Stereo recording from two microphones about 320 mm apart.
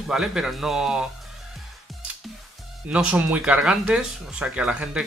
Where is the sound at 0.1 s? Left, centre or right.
Centre.